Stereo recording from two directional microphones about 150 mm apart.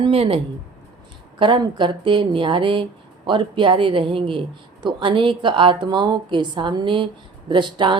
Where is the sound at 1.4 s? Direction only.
30° right (ahead or behind).